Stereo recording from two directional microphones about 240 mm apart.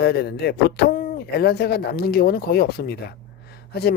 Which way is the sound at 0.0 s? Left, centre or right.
Left.